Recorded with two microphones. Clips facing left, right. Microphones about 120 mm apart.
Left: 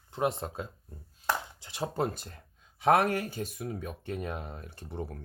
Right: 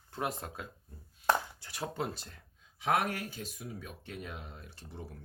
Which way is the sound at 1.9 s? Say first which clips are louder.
Left 6 dB; 50° left (ahead or behind).